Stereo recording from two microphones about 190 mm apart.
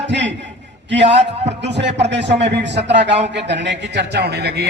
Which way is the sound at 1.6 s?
65° right (ahead or behind).